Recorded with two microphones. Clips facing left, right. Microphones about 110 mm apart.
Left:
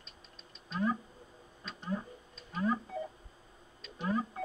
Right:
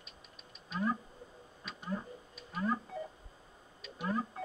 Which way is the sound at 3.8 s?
Centre (ahead or behind).